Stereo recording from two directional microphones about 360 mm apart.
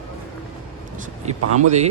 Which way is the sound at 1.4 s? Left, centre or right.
Right.